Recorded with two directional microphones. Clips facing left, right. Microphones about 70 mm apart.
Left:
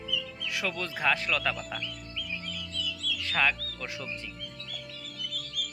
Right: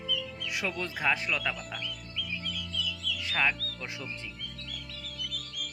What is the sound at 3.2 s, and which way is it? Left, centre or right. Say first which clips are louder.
Speech: left 2 dB; centre.